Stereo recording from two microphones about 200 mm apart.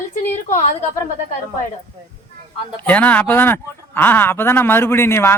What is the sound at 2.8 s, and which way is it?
Speech, 10° left (ahead or behind).